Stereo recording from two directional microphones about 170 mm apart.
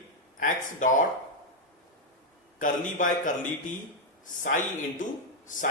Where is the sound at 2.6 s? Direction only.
50° left (ahead or behind).